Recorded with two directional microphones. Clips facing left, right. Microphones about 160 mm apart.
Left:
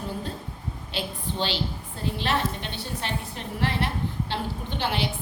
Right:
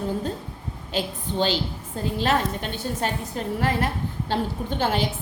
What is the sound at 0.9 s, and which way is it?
A woman's voice, 45° right (ahead or behind).